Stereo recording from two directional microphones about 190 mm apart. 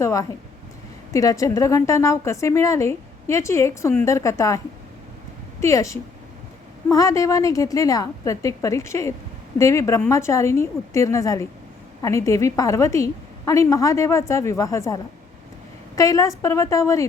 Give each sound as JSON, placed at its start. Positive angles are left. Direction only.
{"t": 0.0, "sound": "a woman's voice", "side_deg": 15}